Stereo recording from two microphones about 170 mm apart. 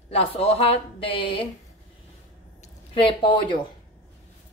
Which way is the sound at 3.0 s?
25° left (ahead or behind).